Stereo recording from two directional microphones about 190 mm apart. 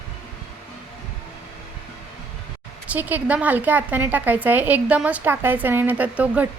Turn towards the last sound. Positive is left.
turn(degrees=-5)  # may be behind; listen again after turning